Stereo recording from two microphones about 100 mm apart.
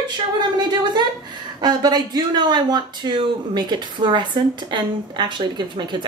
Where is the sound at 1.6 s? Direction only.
45° right (ahead or behind).